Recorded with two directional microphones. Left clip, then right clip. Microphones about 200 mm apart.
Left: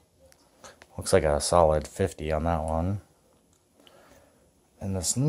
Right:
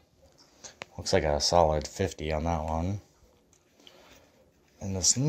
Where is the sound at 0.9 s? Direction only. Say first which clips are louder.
Left 3 dB; 20° left (ahead or behind).